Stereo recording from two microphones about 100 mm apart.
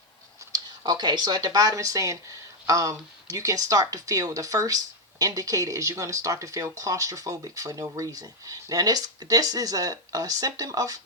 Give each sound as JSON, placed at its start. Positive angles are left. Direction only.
{"t": 0.5, "sound": "speech", "side_deg": -45}